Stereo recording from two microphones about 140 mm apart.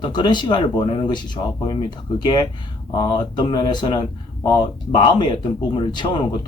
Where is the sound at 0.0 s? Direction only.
30° left (ahead or behind).